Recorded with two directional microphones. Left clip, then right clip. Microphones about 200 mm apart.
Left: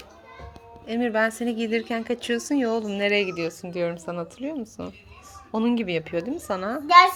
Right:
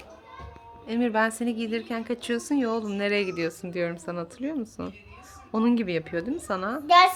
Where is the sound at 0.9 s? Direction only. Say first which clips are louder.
Left 1 dB; centre (ahead or behind).